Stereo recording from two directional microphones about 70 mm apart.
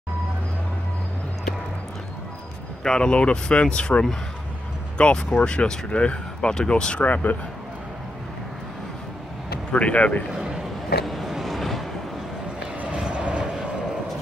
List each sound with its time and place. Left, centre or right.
2.8 s speech: centre
9.7 s speech: centre
10.3 s a sound: centre
11.1 s vehicle: centre
12.5 s vehicle: centre